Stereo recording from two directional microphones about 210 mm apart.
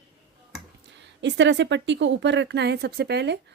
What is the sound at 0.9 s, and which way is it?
A woman's voice, 55° right (ahead or behind).